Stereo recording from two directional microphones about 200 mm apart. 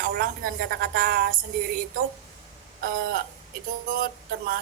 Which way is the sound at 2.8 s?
45° right (ahead or behind).